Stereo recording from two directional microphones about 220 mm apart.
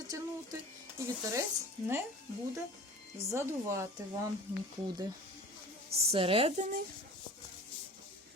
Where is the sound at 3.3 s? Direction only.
10° right (ahead or behind).